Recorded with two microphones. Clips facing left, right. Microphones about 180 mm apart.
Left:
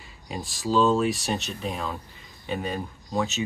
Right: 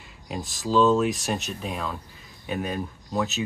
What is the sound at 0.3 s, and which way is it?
Speech, centre (ahead or behind).